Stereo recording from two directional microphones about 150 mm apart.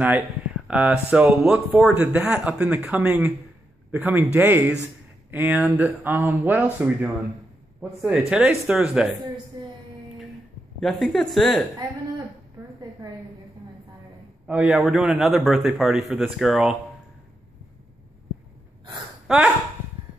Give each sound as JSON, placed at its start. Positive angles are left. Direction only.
{"t": 0.7, "sound": "a man's voice", "side_deg": -5}
{"t": 9.6, "sound": "a sound", "side_deg": -25}
{"t": 10.8, "sound": "a man's voice", "side_deg": 0}
{"t": 14.5, "sound": "a man's voice", "side_deg": -10}
{"t": 19.2, "sound": "speech", "side_deg": -5}